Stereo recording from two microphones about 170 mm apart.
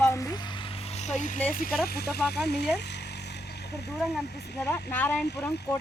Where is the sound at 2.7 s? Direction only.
85° left.